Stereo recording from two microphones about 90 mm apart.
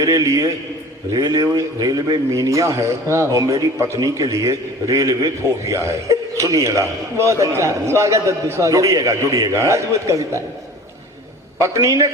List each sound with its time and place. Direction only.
0.0 s a man's voice: 35° right (ahead or behind)
11.6 s speech: 35° right (ahead or behind)